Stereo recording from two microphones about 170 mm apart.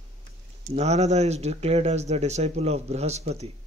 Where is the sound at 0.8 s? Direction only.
40° right (ahead or behind).